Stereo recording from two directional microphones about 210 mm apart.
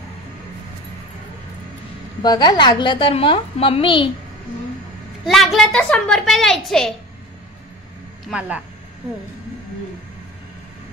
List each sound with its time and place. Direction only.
2.2 s a woman's voice: 20° left (ahead or behind)
5.2 s a woman's voice: centre (ahead or behind)
8.3 s a woman's voice: 5° right (ahead or behind)